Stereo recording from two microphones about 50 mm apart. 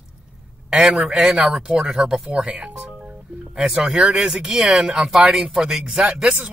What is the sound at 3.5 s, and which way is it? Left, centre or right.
Speech, centre.